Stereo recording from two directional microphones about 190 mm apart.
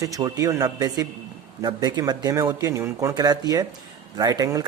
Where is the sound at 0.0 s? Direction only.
20° right (ahead or behind).